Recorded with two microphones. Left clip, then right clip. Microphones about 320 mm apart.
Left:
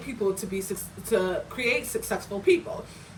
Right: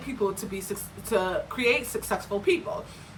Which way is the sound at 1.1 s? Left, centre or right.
Centre.